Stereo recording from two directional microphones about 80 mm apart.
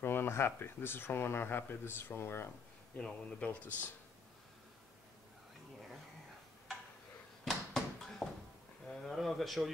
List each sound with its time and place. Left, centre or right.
0.0 s speech: left
3.0 s speech: centre
7.4 s a sound: centre
8.8 s speech: centre